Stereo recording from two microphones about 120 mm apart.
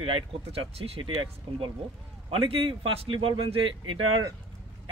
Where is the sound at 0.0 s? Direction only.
50° right (ahead or behind).